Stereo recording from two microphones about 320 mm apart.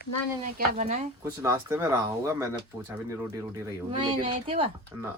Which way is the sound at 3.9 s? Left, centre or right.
Centre.